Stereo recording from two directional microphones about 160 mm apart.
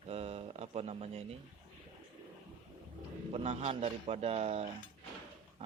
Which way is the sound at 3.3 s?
40° right (ahead or behind).